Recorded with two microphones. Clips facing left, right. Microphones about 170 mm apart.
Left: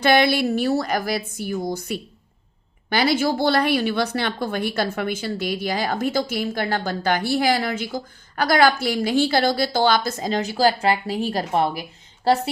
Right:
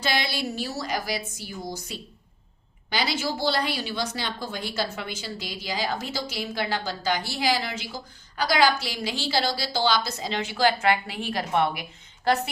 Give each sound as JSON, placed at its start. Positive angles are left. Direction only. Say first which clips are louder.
{"t": 0.0, "sound": "a woman's voice", "louder": "left 10 dB", "side_deg": 60}